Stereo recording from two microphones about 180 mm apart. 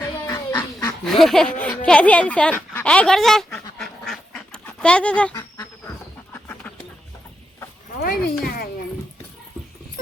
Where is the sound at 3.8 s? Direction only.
Centre (ahead or behind).